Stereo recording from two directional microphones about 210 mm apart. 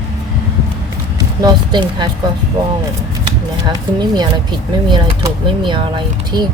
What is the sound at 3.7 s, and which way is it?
Speech, 20° right (ahead or behind).